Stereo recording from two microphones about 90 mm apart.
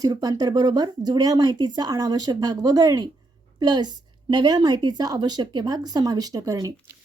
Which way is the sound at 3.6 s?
50° right (ahead or behind).